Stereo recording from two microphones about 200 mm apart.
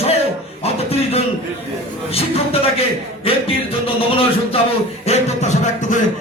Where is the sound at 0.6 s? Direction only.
30° left (ahead or behind).